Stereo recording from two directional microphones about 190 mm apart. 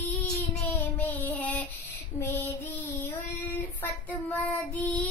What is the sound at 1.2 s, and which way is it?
Child singing, 15° left (ahead or behind).